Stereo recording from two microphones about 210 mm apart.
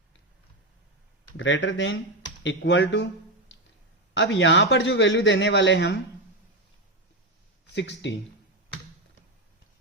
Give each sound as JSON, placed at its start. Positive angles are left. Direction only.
{"t": 1.4, "sound": "a man's voice", "side_deg": 60}
{"t": 4.1, "sound": "a man's voice", "side_deg": 60}
{"t": 7.8, "sound": "a man's voice", "side_deg": 55}